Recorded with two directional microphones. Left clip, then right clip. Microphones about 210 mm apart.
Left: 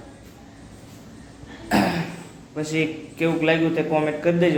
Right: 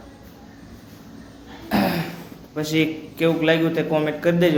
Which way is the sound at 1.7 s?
35° left (ahead or behind).